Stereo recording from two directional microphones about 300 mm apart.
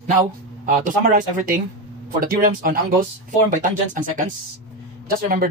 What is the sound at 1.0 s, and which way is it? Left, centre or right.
Speech, right.